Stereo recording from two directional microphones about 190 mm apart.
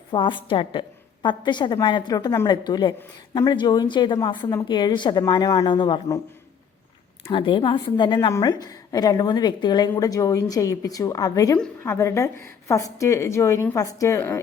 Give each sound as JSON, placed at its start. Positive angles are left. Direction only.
{"t": 0.1, "sound": "a woman's voice", "side_deg": 25}
{"t": 7.3, "sound": "a woman's voice", "side_deg": 25}